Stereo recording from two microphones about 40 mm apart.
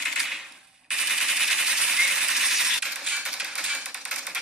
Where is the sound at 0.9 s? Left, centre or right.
Centre.